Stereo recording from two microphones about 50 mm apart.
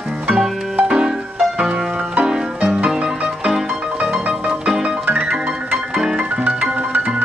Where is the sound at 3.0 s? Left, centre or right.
Centre.